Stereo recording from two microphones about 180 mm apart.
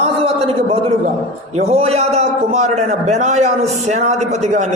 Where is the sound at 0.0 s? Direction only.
35° right (ahead or behind).